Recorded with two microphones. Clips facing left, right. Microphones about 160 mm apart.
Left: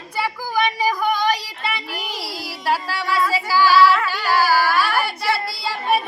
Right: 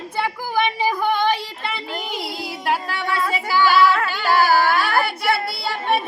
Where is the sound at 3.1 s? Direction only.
50° right (ahead or behind).